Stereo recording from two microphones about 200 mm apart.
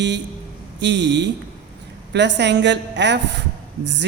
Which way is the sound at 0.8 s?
60° right (ahead or behind).